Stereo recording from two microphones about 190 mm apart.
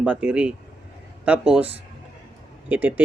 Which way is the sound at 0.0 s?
5° right (ahead or behind).